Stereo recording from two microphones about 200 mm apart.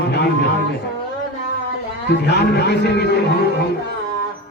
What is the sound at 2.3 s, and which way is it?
Speech, 55° left (ahead or behind).